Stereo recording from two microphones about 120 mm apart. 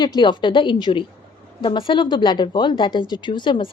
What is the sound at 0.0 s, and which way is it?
Speech, 40° left (ahead or behind).